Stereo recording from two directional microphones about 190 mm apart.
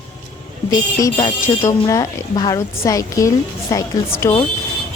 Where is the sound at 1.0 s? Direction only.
20° left (ahead or behind).